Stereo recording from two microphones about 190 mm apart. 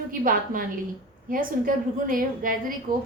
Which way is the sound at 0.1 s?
45° right (ahead or behind).